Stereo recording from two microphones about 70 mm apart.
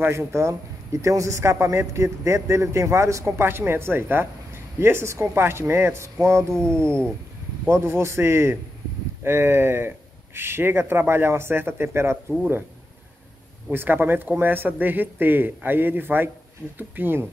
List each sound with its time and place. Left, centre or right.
0.0 s a man's voice: right
3.3 s speech: right
13.7 s a man's voice: right